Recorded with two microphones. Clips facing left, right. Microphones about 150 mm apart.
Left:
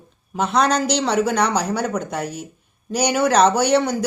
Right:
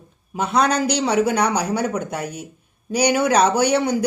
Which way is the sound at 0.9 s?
10° right (ahead or behind).